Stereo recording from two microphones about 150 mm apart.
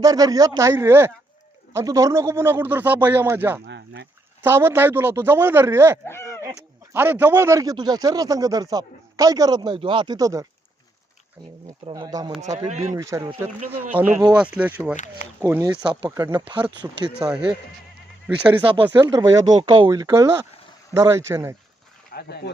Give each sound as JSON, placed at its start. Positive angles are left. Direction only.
{"t": 0.0, "sound": "speech", "side_deg": -25}
{"t": 6.1, "sound": "speech", "side_deg": 15}
{"t": 6.5, "sound": "speech", "side_deg": -15}
{"t": 11.9, "sound": "speech", "side_deg": -25}
{"t": 12.4, "sound": "speech", "side_deg": -50}
{"t": 13.0, "sound": "speech", "side_deg": -20}
{"t": 14.9, "sound": "speech", "side_deg": 55}
{"t": 15.4, "sound": "speech", "side_deg": -15}
{"t": 17.2, "sound": "speech", "side_deg": -5}
{"t": 18.6, "sound": "speech", "side_deg": -35}
{"t": 19.0, "sound": "speech", "side_deg": -25}
{"t": 22.1, "sound": "speech", "side_deg": 90}